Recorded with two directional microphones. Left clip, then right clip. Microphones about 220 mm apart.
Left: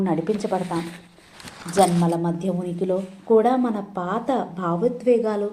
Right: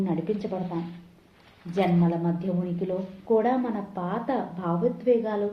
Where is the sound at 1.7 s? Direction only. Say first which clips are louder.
Left 7 dB; 35° left (ahead or behind).